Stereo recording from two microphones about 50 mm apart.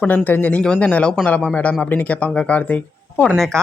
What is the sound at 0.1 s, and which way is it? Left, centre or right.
Speech, left.